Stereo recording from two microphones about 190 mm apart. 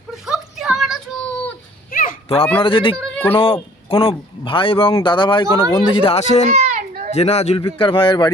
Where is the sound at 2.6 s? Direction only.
25° left (ahead or behind).